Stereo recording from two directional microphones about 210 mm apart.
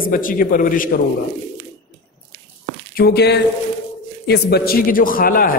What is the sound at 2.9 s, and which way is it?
A man's voice, 50° left (ahead or behind).